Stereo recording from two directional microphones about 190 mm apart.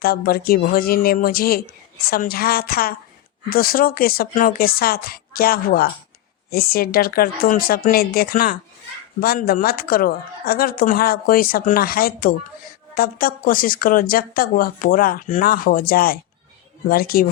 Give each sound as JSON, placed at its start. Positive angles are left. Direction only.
{"t": 0.0, "sound": "speech", "side_deg": 50}